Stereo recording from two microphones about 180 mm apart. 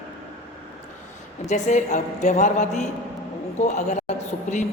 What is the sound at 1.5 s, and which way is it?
A woman's voice, 40° left (ahead or behind).